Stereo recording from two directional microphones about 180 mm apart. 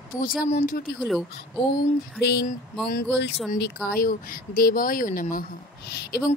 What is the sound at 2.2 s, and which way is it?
Speech, 65° left (ahead or behind).